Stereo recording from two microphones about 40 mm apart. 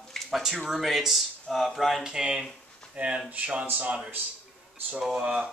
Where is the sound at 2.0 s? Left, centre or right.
Centre.